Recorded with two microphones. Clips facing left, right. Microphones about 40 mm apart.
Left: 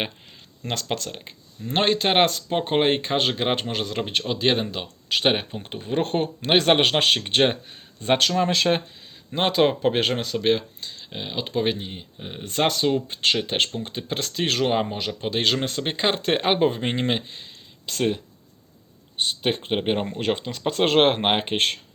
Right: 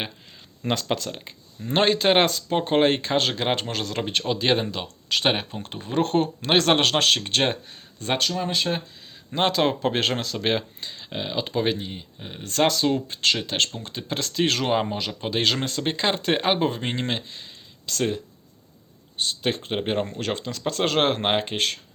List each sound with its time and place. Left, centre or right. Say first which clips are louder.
0.6 s speech: right 3 dB; centre
8.2 s speech: left 4 dB; left
9.5 s speech: left 5 dB; centre
10.3 s speech: left 6 dB; centre
10.8 s a sound: right 2 dB; centre
11.2 s speech: even; centre
16.8 s speech: left 3 dB; left
19.1 s speech: left 1 dB; left